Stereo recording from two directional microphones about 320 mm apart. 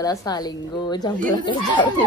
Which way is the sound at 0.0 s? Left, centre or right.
Centre.